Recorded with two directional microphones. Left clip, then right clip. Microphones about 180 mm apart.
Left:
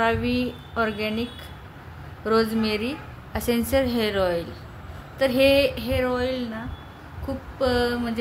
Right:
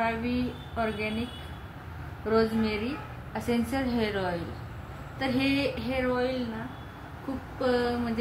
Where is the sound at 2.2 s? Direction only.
55° left (ahead or behind).